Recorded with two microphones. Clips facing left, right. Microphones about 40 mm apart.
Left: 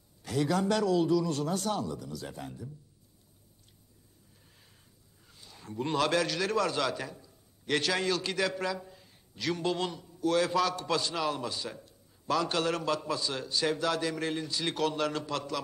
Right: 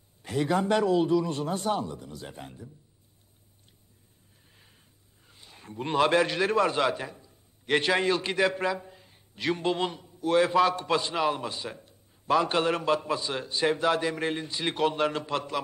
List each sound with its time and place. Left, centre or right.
0.2 s a man's voice: right
5.3 s a man's voice: right